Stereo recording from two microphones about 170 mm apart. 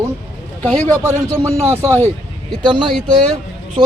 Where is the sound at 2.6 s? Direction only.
25° right (ahead or behind).